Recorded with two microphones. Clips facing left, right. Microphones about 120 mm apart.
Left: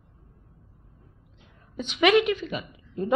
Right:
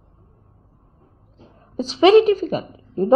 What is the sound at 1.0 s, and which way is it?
A woman's voice, 35° right (ahead or behind).